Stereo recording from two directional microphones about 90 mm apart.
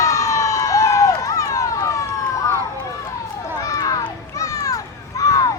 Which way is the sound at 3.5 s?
45° left (ahead or behind).